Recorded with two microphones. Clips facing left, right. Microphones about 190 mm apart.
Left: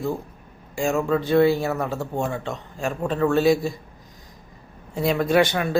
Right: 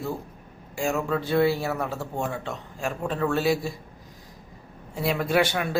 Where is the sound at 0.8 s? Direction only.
5° right (ahead or behind).